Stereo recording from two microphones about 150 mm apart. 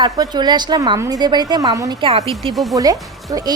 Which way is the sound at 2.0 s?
40° right (ahead or behind).